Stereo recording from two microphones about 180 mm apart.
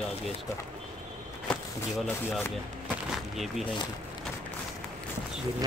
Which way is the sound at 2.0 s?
10° left (ahead or behind).